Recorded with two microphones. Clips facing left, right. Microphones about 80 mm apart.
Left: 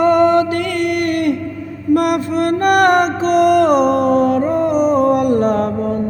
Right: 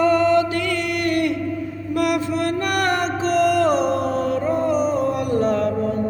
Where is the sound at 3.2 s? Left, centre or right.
Left.